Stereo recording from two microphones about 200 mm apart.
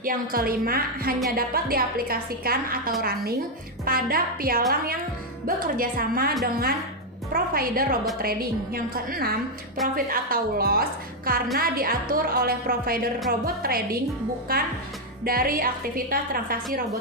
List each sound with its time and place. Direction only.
0.0 s a woman's voice: 45° right (ahead or behind)